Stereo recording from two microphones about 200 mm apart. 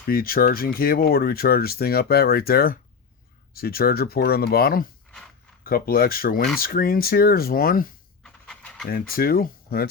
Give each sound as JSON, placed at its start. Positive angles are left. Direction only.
{"t": 0.1, "sound": "speech", "side_deg": 45}
{"t": 8.2, "sound": "a sound", "side_deg": 5}
{"t": 8.9, "sound": "speech", "side_deg": 50}